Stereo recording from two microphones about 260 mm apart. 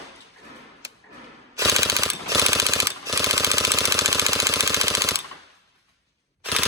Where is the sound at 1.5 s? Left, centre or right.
Centre.